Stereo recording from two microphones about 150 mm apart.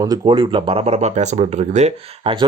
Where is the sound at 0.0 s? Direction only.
25° right (ahead or behind); by 2.3 s 50° right (ahead or behind).